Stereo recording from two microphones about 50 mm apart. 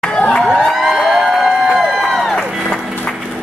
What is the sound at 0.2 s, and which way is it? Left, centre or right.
Crowd, left.